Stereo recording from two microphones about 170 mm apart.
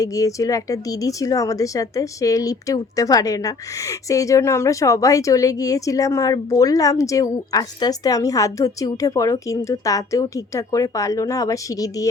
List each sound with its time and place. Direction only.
0.0 s speech: 20° left (ahead or behind)